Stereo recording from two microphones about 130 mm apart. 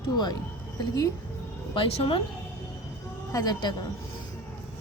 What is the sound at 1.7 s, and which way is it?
Speech, 45° left (ahead or behind).